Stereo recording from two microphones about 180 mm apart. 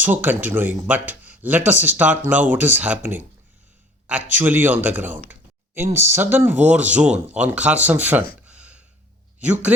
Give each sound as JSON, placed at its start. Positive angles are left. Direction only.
{"t": 0.0, "sound": "a man's voice", "side_deg": -10}
{"t": 8.4, "sound": "a sound", "side_deg": -5}
{"t": 9.4, "sound": "a man's voice", "side_deg": -10}